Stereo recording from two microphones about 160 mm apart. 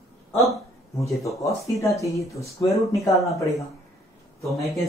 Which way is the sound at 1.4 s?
20° left (ahead or behind).